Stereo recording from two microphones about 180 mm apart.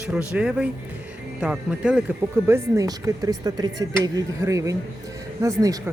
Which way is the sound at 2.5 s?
15° right (ahead or behind).